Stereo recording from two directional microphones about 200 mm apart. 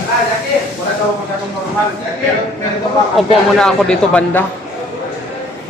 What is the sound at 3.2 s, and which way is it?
Speech, 5° left (ahead or behind).